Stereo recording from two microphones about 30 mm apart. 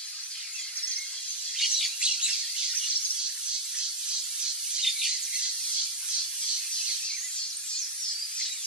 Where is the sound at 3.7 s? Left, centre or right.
Right.